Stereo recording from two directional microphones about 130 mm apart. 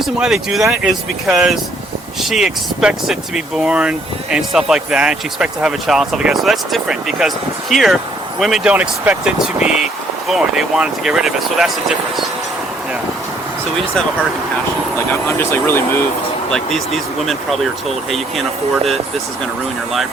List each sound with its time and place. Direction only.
0.0 s speech: 5° right (ahead or behind)
14.9 s speech: 20° left (ahead or behind)
16.5 s speech: 5° left (ahead or behind)